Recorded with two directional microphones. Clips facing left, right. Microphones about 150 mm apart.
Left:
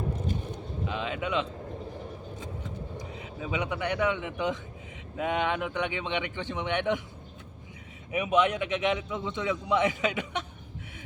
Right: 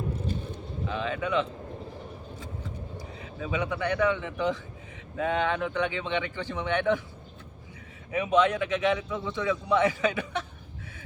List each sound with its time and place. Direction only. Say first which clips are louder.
0.9 s a man's voice: right 2 dB; 20° left (ahead or behind)
3.0 s a man's voice: even; 20° left (ahead or behind)
8.1 s a man's voice: right 2 dB; 15° left (ahead or behind)